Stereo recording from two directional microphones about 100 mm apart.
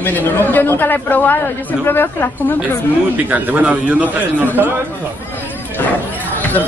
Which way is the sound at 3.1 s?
15° right (ahead or behind).